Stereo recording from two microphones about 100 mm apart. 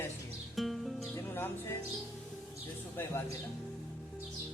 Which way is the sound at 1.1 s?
20° left (ahead or behind).